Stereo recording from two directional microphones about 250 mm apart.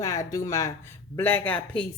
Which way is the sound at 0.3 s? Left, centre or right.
Centre.